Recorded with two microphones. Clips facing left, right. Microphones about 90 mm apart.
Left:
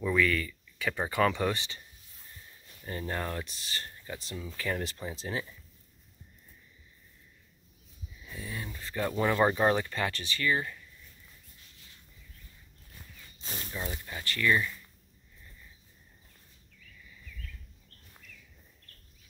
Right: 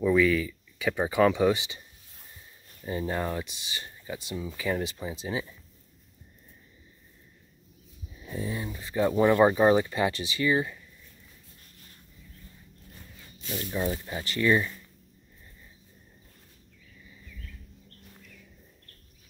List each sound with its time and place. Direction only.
0.0 s speech: 10° right (ahead or behind)
2.8 s speech: 10° right (ahead or behind)
8.2 s speech: 30° right (ahead or behind)
8.5 s speech: 15° right (ahead or behind)
11.6 s a sound: 45° right (ahead or behind)
13.4 s snake: 35° left (ahead or behind)
13.7 s speech: 20° right (ahead or behind)